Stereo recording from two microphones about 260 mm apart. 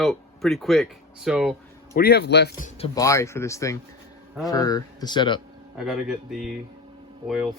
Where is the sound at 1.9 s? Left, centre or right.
Left; by 5.4 s centre.